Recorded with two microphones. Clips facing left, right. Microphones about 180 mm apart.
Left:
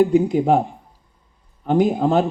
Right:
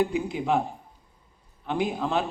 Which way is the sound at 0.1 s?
40° left (ahead or behind).